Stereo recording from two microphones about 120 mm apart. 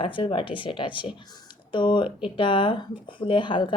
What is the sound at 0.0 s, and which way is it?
Speech, 45° left (ahead or behind).